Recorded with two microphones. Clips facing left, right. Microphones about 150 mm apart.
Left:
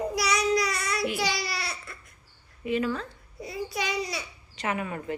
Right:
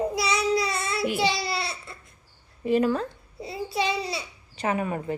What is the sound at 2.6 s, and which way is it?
Speech, 40° right (ahead or behind).